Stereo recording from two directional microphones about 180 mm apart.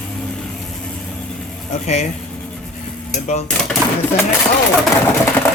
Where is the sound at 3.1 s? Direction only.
40° left (ahead or behind).